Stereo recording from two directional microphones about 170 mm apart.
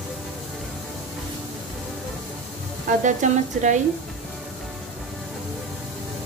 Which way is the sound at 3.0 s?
45° right (ahead or behind).